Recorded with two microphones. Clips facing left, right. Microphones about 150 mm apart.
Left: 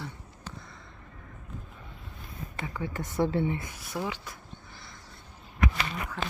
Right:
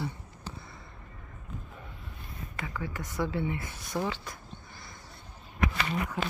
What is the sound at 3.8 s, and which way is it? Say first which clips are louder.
Speech: right 2 dB; 10° left (ahead or behind).